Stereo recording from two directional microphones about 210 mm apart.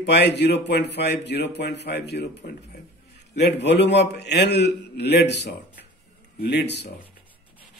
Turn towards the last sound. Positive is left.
turn(degrees=55)  # may be behind; listen again after turning